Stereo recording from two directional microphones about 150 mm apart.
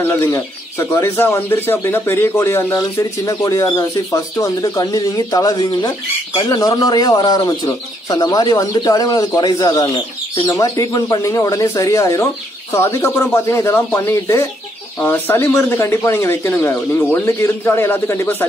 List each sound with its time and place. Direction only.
0.0 s speech: 15° left (ahead or behind)